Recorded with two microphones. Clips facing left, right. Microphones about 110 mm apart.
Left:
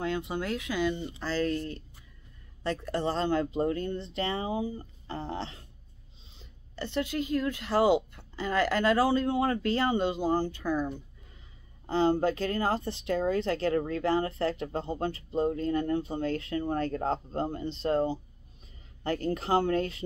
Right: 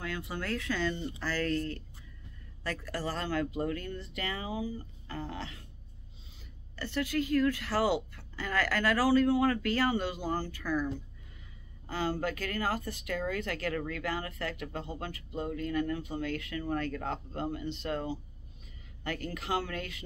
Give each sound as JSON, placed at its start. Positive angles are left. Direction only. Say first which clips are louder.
{"t": 0.0, "sound": "speech", "louder": "left 6 dB", "side_deg": 20}
{"t": 6.7, "sound": "a woman's voice", "louder": "left 1 dB", "side_deg": 20}